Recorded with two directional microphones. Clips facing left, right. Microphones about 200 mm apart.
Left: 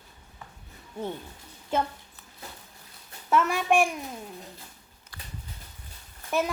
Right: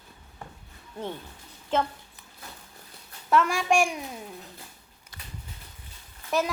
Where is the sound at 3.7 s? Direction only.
5° left (ahead or behind).